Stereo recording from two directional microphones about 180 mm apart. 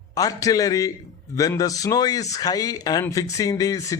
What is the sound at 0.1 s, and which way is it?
A man's voice, 20° left (ahead or behind).